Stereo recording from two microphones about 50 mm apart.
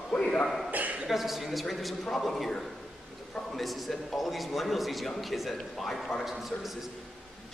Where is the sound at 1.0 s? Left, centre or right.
Centre.